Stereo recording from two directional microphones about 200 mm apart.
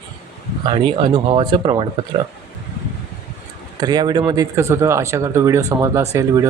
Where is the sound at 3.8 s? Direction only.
20° right (ahead or behind).